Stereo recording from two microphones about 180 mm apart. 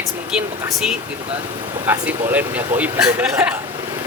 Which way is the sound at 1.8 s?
10° right (ahead or behind).